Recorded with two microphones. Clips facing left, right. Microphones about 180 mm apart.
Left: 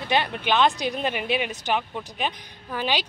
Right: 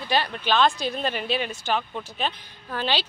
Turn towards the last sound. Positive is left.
turn(degrees=15)  # may be behind; listen again after turning